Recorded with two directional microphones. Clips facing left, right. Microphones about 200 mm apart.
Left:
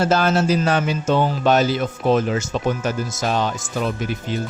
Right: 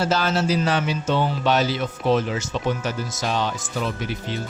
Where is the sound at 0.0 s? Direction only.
50° left (ahead or behind).